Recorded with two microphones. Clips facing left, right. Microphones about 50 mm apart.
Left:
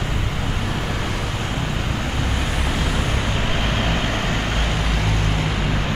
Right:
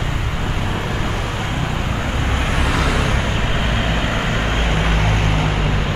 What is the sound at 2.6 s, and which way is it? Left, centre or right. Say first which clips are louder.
Vehicle: right 7 dB; right.